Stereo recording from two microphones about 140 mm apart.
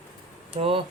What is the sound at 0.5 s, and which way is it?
Speech, 40° right (ahead or behind).